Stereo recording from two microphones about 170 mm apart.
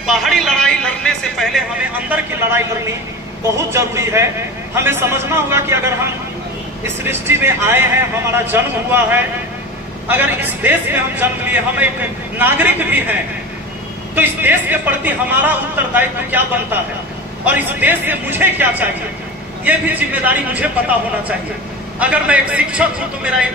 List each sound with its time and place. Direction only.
0.0 s a sound: centre (ahead or behind)
2.0 s a man's voice: 10° right (ahead or behind)
7.0 s a man's voice: 15° right (ahead or behind)
14.1 s a man's voice: 10° right (ahead or behind)
22.0 s a man's voice: 10° right (ahead or behind)